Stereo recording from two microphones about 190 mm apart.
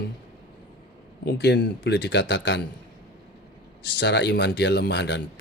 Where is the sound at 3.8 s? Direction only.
65° left (ahead or behind).